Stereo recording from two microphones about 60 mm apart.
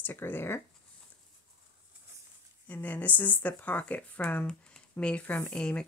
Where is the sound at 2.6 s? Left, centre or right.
Left.